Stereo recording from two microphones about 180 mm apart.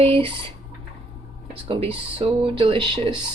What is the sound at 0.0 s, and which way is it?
Speech, 30° right (ahead or behind).